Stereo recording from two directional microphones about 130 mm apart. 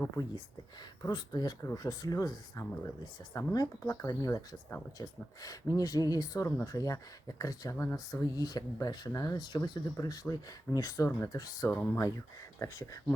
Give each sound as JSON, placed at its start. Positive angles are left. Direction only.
{"t": 1.0, "sound": "speech", "side_deg": 30}
{"t": 11.7, "sound": "speech", "side_deg": 15}
{"t": 12.5, "sound": "speech", "side_deg": 25}